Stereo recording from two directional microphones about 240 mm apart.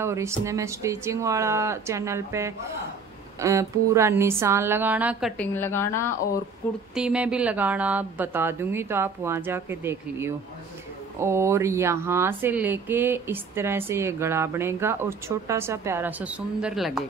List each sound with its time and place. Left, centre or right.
0.0 s speech: centre
5.4 s a woman's voice: centre
7.0 s speech: centre